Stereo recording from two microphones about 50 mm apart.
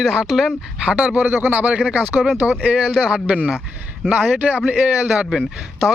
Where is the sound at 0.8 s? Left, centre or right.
Right.